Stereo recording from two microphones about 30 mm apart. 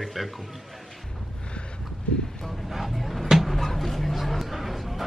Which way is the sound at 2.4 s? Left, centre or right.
Centre.